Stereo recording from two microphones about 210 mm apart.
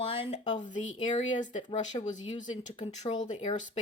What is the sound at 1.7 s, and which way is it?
Speech, 30° left (ahead or behind).